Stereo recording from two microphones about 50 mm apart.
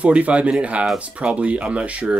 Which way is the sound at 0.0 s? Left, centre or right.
Right.